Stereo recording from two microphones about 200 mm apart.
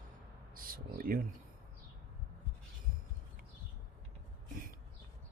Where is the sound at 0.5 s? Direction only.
45° right (ahead or behind).